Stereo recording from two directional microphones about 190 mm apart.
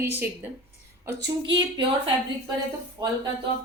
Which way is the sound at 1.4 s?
25° right (ahead or behind).